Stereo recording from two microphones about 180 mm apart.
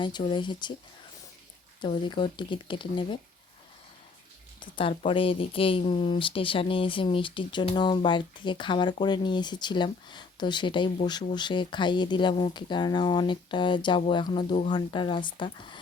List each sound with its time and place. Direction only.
0.0 s speech: 25° left (ahead or behind)
1.8 s speech: 25° left (ahead or behind)
4.6 s speech: 30° left (ahead or behind)